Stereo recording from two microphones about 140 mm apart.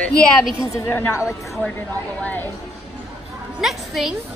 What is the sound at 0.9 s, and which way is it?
Speech, 20° left (ahead or behind).